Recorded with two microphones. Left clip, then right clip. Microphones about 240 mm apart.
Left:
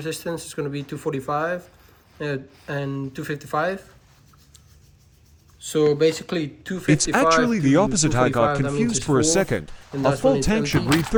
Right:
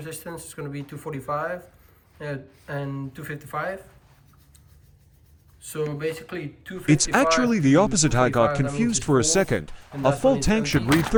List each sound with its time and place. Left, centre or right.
0.0 s speech: centre
5.6 s speech: centre
6.8 s speech: centre